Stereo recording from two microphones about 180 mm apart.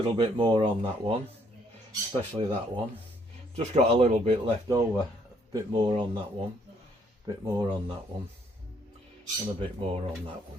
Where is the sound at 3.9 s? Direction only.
35° right (ahead or behind).